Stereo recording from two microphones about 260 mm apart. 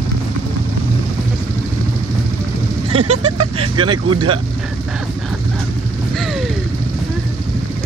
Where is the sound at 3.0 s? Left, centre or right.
Right.